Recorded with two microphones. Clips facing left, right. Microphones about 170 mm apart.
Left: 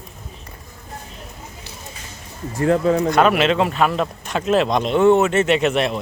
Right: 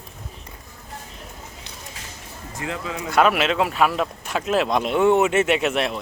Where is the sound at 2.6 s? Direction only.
45° left (ahead or behind).